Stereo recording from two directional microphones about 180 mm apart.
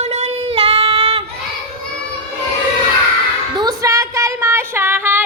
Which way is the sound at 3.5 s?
20° right (ahead or behind).